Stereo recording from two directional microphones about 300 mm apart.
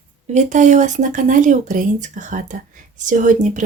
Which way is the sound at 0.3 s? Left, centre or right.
Right.